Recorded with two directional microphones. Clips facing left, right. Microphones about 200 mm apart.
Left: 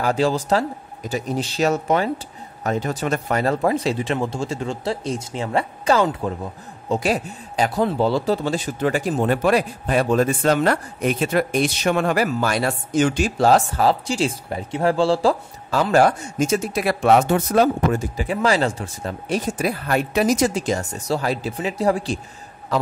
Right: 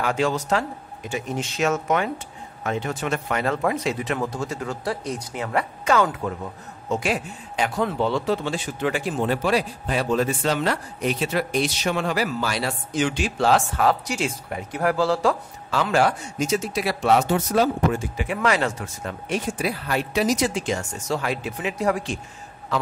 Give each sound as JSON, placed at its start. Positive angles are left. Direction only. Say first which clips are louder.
{"t": 0.0, "sound": "speech", "louder": "left 3 dB", "side_deg": 35}
{"t": 17.9, "sound": "speech", "louder": "left 3 dB", "side_deg": 35}